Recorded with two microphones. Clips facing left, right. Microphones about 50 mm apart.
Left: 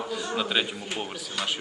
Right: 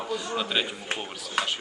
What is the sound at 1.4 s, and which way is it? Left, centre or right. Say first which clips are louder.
Speech: right 3 dB; right.